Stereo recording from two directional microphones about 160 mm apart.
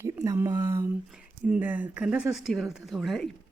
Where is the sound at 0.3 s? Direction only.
20° right (ahead or behind).